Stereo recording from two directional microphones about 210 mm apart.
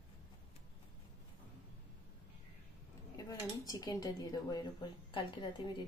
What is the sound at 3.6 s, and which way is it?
A woman's voice, 20° left (ahead or behind).